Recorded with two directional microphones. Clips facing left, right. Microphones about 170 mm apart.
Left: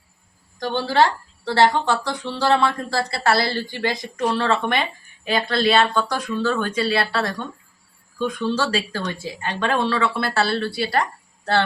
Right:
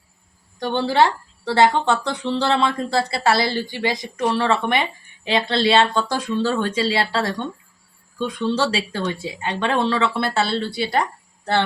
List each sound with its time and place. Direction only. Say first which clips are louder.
0.7 s speech: right 1 dB; 20° right (ahead or behind)
8.4 s speech: right 4 dB; 20° right (ahead or behind)